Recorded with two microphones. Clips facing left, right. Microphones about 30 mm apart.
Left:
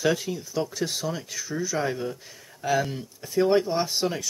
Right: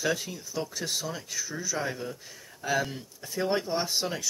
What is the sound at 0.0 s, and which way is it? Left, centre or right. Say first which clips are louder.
Speech: left 5 dB; centre.